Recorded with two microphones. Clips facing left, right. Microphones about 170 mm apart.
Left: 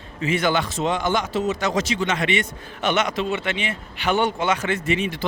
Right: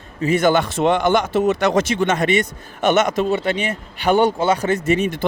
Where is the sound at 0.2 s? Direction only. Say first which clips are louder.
Right 5 dB; 40° right (ahead or behind).